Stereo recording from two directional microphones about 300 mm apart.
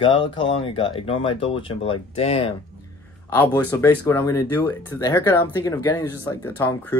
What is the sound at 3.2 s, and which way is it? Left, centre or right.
Speech, centre.